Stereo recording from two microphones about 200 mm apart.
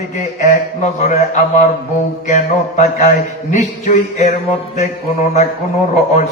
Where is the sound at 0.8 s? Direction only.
35° left (ahead or behind).